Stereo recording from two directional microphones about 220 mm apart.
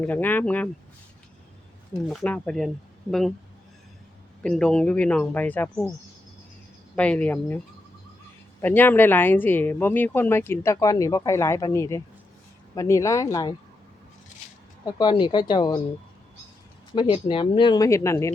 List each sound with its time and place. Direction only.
0.0 s speech: 10° left (ahead or behind)
2.0 s speech: 5° left (ahead or behind)
4.4 s speech: 5° left (ahead or behind)
6.9 s speech: 5° left (ahead or behind)
8.6 s speech: 10° left (ahead or behind)
14.8 s speech: 20° left (ahead or behind)
16.9 s speech: 20° left (ahead or behind)